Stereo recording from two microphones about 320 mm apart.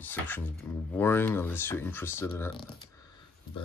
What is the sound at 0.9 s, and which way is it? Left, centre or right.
Speech, centre.